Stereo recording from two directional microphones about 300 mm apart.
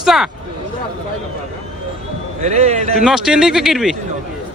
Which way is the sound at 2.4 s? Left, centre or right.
Right.